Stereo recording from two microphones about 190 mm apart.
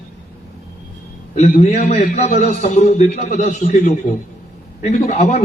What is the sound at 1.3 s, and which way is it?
A man's voice, 35° left (ahead or behind).